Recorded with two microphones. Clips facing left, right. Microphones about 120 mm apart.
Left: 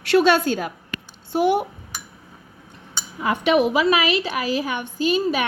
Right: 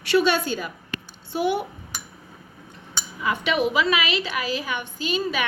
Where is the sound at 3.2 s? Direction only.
55° left (ahead or behind).